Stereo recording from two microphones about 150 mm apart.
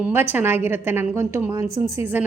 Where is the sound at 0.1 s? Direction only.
15° right (ahead or behind).